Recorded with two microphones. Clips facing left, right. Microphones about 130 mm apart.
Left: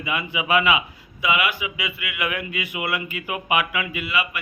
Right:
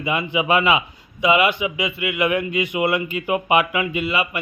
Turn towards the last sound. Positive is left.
turn(degrees=-25)  # may be behind; listen again after turning